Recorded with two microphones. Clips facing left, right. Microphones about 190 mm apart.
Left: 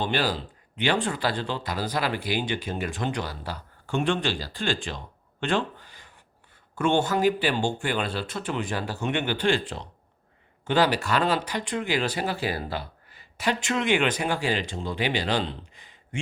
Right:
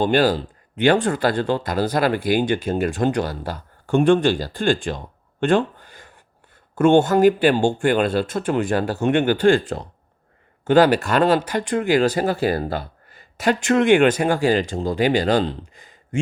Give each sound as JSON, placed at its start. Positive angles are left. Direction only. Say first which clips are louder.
{"t": 0.0, "sound": "speech", "louder": "right 9 dB", "side_deg": -50}